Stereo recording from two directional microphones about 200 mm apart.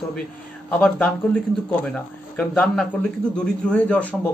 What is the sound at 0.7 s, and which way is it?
A man's voice, 5° left (ahead or behind).